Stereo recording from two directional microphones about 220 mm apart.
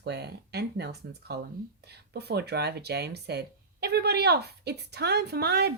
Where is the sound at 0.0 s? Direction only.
50° right (ahead or behind).